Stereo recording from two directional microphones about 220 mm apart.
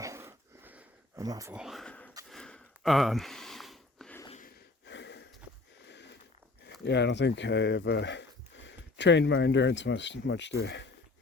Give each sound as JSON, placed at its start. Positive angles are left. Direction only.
{"t": 0.0, "sound": "dog", "side_deg": -15}
{"t": 1.5, "sound": "speech", "side_deg": 0}
{"t": 2.3, "sound": "a sound", "side_deg": 0}
{"t": 4.3, "sound": "gasp", "side_deg": 35}
{"t": 4.9, "sound": "a sound", "side_deg": 50}
{"t": 6.8, "sound": "speech", "side_deg": 50}